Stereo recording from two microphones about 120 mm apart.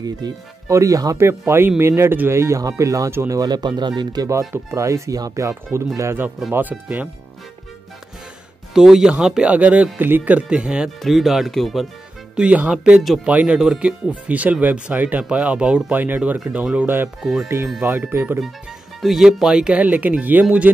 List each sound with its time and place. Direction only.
0.0 s speech: 30° right (ahead or behind)
8.7 s speech: 5° right (ahead or behind)
12.4 s speech: 10° right (ahead or behind)
18.1 s speech: 20° right (ahead or behind)
18.9 s speech: centre (ahead or behind)